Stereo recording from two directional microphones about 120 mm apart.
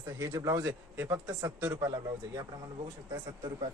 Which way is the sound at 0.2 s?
25° right (ahead or behind).